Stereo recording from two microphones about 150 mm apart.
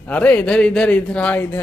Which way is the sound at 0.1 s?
10° left (ahead or behind).